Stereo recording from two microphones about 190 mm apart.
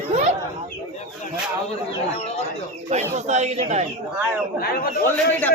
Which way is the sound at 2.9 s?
35° right (ahead or behind).